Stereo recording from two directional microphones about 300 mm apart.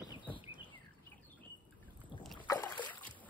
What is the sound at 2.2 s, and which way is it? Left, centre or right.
Boat, centre.